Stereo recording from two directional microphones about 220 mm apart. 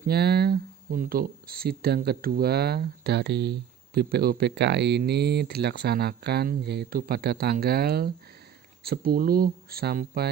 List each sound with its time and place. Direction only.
0.0 s speech: 45° right (ahead or behind)